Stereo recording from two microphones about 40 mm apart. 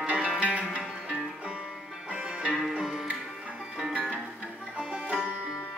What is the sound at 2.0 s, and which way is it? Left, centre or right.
Music, right.